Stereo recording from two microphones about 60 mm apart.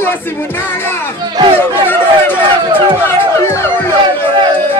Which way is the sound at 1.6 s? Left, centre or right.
Left.